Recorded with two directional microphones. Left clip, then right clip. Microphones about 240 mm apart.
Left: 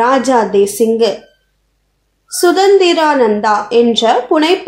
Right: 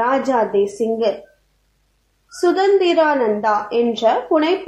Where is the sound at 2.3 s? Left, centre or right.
Left.